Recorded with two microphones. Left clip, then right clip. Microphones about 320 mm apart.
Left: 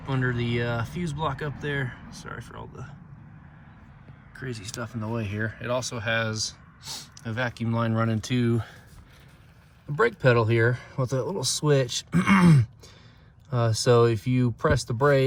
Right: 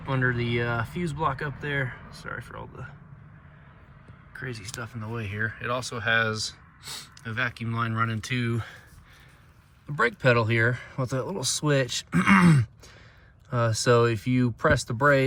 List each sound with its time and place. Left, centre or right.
0.2 s speech: right
0.7 s speech: centre
4.4 s speech: centre
9.9 s speech: centre